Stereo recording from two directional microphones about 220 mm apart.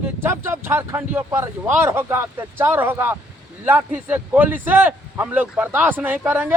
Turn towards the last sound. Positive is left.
turn(degrees=-10)  # may be behind; listen again after turning